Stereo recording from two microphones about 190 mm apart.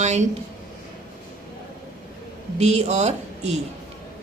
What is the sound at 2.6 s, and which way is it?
Speech, 35° right (ahead or behind).